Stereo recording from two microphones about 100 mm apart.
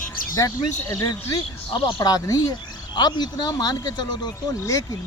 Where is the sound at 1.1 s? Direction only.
45° left (ahead or behind).